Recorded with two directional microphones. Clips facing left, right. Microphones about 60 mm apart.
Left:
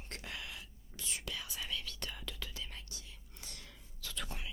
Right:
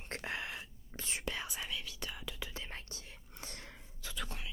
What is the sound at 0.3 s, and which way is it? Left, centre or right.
Whispering, right.